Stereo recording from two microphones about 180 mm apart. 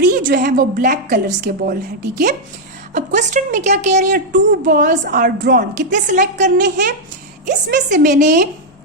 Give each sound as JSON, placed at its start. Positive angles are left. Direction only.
{"t": 0.0, "sound": "a woman's voice", "side_deg": -50}
{"t": 2.9, "sound": "a woman's voice", "side_deg": -45}